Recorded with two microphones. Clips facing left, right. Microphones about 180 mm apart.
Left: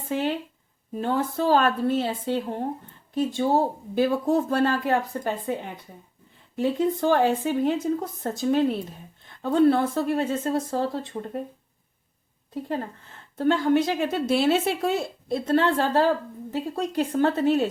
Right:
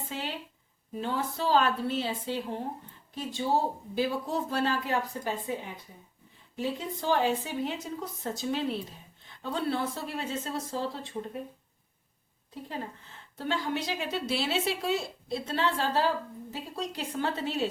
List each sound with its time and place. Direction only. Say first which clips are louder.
0.1 s a woman's voice: left 13 dB; 55° left (ahead or behind)
6.6 s a woman's voice: left 10 dB; 55° left (ahead or behind)
13.3 s a woman's voice: left 11 dB; 50° left (ahead or behind)